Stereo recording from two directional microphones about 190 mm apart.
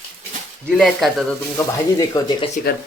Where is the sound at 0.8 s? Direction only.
Centre (ahead or behind).